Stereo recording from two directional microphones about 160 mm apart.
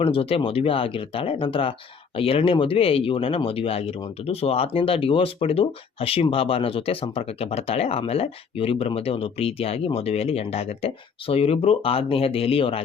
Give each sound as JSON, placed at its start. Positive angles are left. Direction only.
{"t": 0.0, "sound": "speech", "side_deg": 35}